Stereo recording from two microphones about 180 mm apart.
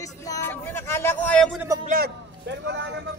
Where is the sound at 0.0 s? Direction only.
15° left (ahead or behind).